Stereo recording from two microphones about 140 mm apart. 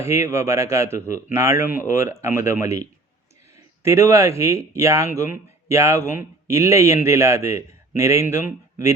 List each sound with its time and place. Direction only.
0.0 s a man's voice: 20° right (ahead or behind)
3.8 s a man's voice: 20° right (ahead or behind)